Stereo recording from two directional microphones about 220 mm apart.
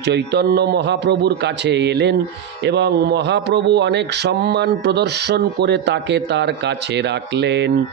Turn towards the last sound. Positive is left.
turn(degrees=-50)  # may be behind; listen again after turning